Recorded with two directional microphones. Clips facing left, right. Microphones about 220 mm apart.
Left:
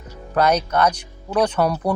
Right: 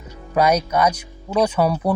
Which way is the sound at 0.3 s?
10° right (ahead or behind).